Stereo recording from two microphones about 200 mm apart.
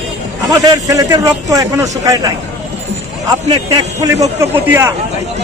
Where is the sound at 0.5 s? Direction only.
20° right (ahead or behind).